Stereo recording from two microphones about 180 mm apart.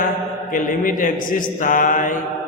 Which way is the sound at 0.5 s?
50° left (ahead or behind).